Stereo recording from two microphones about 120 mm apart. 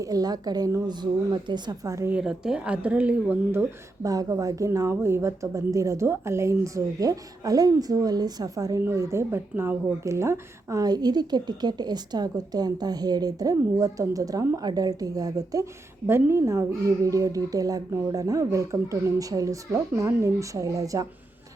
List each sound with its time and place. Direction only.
0.0 s a woman's voice: 30° right (ahead or behind)
2.1 s speech: 5° right (ahead or behind)
4.0 s a woman's voice: 30° right (ahead or behind)